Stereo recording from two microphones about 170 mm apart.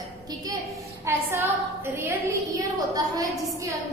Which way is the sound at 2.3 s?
20° right (ahead or behind).